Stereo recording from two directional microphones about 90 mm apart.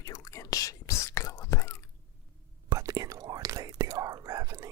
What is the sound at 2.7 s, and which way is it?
Whispering, 40° right (ahead or behind).